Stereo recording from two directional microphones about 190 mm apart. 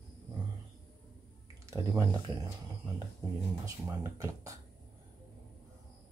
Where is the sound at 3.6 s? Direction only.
15° right (ahead or behind).